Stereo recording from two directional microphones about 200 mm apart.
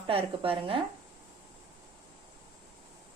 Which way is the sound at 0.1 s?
30° right (ahead or behind).